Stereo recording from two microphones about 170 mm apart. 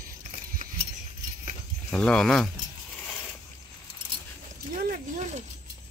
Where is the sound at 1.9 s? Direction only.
5° left (ahead or behind).